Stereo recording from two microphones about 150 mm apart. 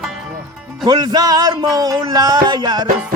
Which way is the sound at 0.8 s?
25° right (ahead or behind).